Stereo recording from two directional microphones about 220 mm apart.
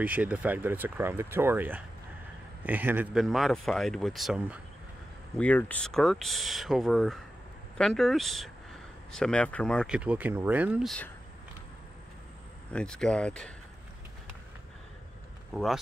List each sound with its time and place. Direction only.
0.0 s speech: 5° right (ahead or behind)
5.4 s speech: 5° left (ahead or behind)
12.7 s speech: 5° left (ahead or behind)
15.5 s speech: centre (ahead or behind)